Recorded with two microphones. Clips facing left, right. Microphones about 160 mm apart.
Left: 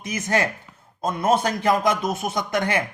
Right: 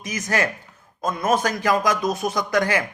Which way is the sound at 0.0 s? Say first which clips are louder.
Left 1 dB; 30° left (ahead or behind).